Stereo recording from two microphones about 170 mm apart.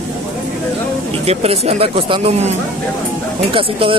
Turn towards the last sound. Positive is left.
turn(degrees=-30)  # may be behind; listen again after turning